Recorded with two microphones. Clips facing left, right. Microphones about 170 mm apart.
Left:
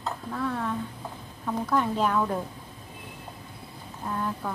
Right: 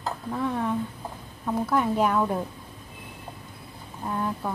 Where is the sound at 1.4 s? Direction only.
10° right (ahead or behind).